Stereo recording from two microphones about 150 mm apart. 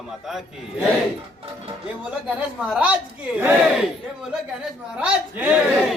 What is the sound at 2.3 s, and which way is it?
Speech, 10° right (ahead or behind).